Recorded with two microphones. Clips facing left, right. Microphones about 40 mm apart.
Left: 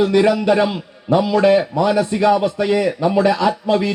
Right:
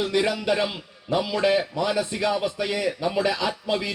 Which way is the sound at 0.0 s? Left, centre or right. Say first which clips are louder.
Left 9 dB; centre.